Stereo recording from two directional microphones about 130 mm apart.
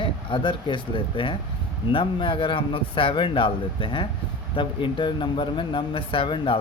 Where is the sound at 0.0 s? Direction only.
40° left (ahead or behind).